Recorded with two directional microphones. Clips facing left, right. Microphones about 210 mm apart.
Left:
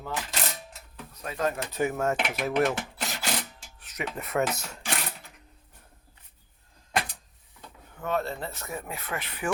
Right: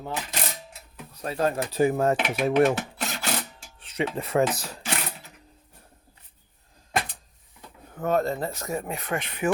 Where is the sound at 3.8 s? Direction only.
30° right (ahead or behind).